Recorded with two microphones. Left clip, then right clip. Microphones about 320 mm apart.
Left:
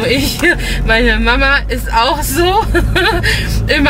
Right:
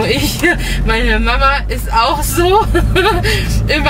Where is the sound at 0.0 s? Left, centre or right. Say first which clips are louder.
Left 1 dB; centre.